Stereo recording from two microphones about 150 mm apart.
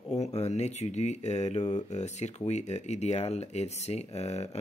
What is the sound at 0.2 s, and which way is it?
Speech, 45° left (ahead or behind).